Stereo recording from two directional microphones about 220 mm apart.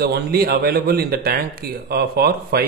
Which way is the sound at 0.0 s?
45° right (ahead or behind).